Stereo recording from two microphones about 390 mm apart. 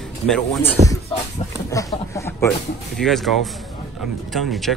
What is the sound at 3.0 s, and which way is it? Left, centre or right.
A man's voice, centre.